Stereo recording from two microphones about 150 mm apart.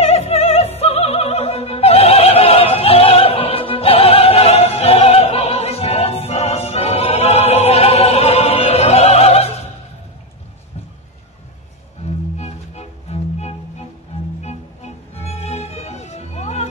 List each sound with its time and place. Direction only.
0.0 s opera: 45° left (ahead or behind)
12.0 s music: 45° left (ahead or behind)
15.3 s music: 45° left (ahead or behind)